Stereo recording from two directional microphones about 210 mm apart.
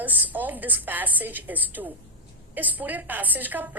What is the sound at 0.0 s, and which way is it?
A woman's voice, 10° right (ahead or behind).